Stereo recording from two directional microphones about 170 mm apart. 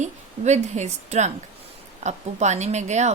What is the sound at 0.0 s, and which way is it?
A woman's voice, 40° right (ahead or behind).